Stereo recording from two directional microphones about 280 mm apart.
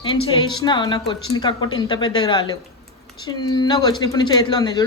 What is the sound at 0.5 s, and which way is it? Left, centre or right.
Speech, centre.